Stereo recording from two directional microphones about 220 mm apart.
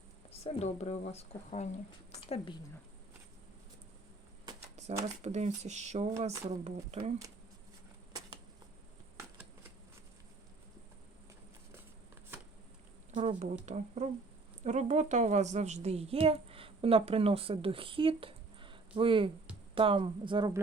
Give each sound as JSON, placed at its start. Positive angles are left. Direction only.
{"t": 0.4, "sound": "a woman's voice", "side_deg": 30}
{"t": 5.2, "sound": "speech", "side_deg": -30}
{"t": 13.1, "sound": "a woman's voice", "side_deg": -30}